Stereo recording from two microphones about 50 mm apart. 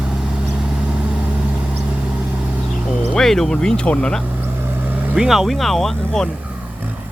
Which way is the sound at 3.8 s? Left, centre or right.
Left.